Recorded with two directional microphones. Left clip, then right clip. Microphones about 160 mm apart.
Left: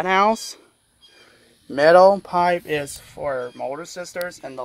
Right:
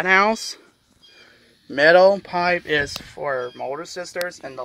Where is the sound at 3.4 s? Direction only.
Centre (ahead or behind).